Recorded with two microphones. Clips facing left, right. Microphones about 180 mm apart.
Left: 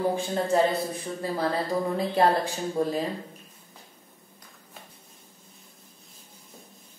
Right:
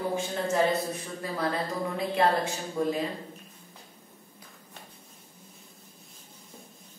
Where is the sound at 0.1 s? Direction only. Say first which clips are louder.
Left 4 dB; 30° left (ahead or behind).